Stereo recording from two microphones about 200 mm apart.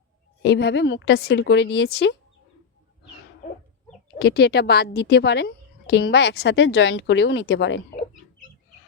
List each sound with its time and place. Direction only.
0.4 s a woman's voice: 60° left (ahead or behind)
4.2 s a woman's voice: 55° left (ahead or behind)